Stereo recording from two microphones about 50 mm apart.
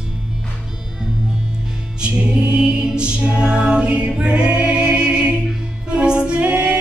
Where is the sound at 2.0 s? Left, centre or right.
Right.